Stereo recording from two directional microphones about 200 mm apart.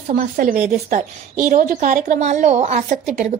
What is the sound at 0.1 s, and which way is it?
A woman's voice, 45° right (ahead or behind).